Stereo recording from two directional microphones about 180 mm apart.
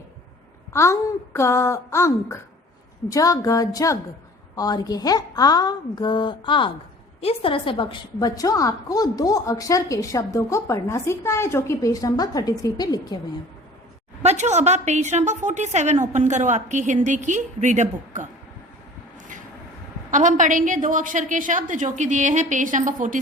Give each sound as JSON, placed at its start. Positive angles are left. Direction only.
{"t": 0.7, "sound": "a woman's voice", "side_deg": 15}
{"t": 14.2, "sound": "a woman's voice", "side_deg": -40}
{"t": 20.1, "sound": "a woman's voice", "side_deg": -45}